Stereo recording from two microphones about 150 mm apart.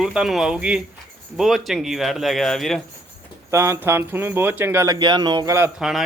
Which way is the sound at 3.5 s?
20° right (ahead or behind).